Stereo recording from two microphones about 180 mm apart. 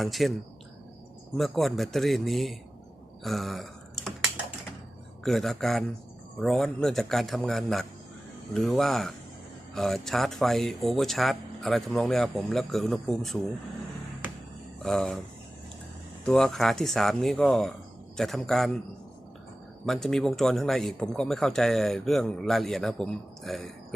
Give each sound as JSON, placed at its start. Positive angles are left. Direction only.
{"t": 0.0, "sound": "speech", "side_deg": 0}
{"t": 1.4, "sound": "speech", "side_deg": 0}
{"t": 3.2, "sound": "typing", "side_deg": 0}
{"t": 5.2, "sound": "speech", "side_deg": 0}
{"t": 14.8, "sound": "speech", "side_deg": 0}
{"t": 16.2, "sound": "speech", "side_deg": 5}
{"t": 19.8, "sound": "speech", "side_deg": 0}